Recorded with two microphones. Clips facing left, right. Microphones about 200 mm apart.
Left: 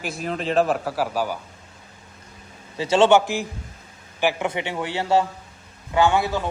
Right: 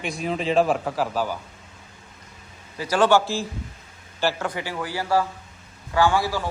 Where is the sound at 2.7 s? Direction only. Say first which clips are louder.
Left 3 dB; 25° left (ahead or behind).